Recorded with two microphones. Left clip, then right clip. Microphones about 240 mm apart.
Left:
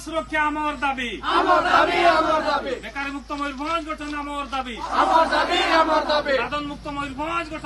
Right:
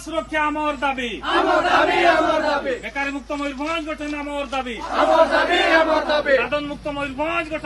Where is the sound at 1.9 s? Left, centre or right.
Centre.